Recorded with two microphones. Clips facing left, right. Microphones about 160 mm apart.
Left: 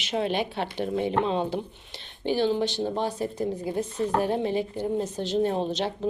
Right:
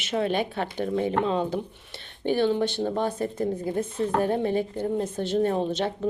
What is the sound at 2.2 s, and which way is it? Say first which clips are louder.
A woman's voice: right 1 dB; 55° right (ahead or behind).